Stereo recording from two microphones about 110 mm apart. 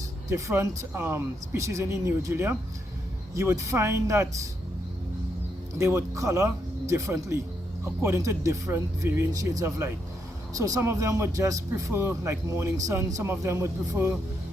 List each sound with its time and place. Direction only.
0.3 s speech: 25° right (ahead or behind)
5.7 s speech: 20° right (ahead or behind)